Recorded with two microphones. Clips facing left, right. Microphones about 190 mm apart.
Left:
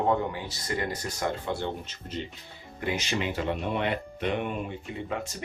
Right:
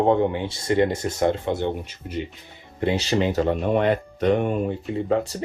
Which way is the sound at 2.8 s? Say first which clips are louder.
Right 8 dB; 30° right (ahead or behind).